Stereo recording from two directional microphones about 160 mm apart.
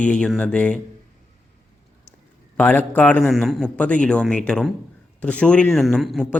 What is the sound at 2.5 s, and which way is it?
A man's voice, 10° left (ahead or behind).